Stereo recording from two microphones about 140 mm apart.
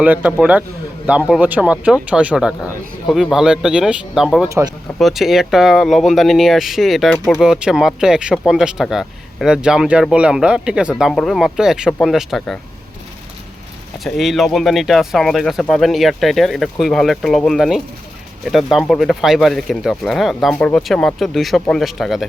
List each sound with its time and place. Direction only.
0.0 s speech: 10° right (ahead or behind)
4.4 s speech: 20° right (ahead or behind)
4.9 s speech: centre (ahead or behind)
14.0 s speech: centre (ahead or behind)